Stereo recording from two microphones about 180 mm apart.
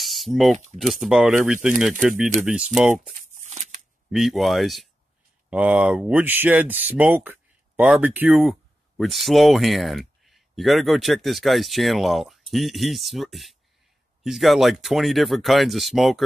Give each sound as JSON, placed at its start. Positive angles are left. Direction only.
{"t": 0.0, "sound": "typing", "side_deg": 0}
{"t": 0.7, "sound": "speech", "side_deg": 0}
{"t": 3.2, "sound": "a sound", "side_deg": -40}
{"t": 4.1, "sound": "speech", "side_deg": 0}